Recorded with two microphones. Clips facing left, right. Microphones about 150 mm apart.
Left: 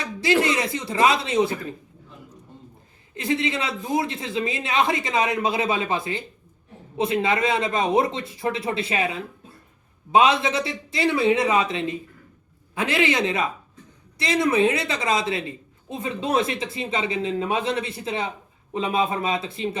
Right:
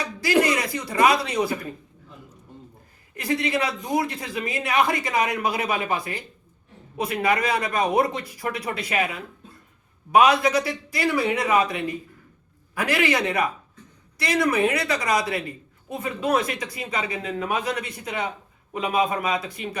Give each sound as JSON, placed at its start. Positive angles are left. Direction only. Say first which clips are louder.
{"t": 0.4, "sound": "a woman's voice", "louder": "left 1 dB", "side_deg": 25}
{"t": 3.2, "sound": "a woman's voice", "louder": "even", "side_deg": 25}